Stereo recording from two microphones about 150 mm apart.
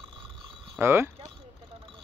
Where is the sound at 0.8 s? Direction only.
15° right (ahead or behind).